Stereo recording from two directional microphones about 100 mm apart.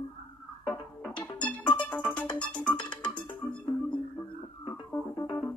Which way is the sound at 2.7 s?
50° left (ahead or behind).